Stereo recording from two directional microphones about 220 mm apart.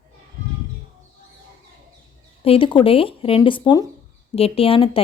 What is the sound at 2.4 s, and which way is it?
Speech, 25° left (ahead or behind).